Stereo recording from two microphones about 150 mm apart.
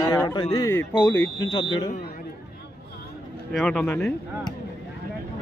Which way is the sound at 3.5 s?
5° left (ahead or behind).